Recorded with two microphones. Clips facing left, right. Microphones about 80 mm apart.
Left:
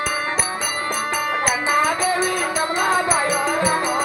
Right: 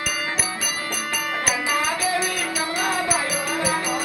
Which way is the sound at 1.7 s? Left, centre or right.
Left.